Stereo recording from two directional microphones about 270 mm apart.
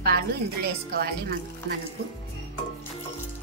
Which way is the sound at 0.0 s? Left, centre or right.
Right.